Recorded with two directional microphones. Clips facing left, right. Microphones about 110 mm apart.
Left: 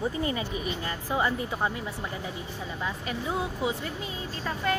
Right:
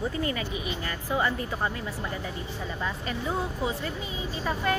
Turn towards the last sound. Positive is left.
turn(degrees=-5)  # may be behind; listen again after turning